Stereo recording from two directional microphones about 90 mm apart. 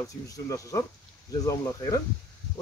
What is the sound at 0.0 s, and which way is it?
Speech, 40° left (ahead or behind).